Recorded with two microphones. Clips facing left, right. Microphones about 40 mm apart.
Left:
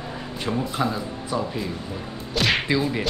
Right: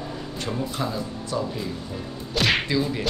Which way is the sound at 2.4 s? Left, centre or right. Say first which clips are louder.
Even; centre.